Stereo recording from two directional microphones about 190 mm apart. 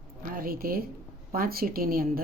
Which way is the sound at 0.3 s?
50° right (ahead or behind).